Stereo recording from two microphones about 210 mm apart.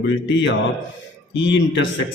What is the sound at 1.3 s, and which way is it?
Speech, 60° left (ahead or behind).